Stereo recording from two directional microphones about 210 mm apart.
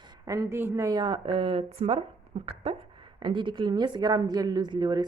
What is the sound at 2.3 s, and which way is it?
Dog, 30° right (ahead or behind).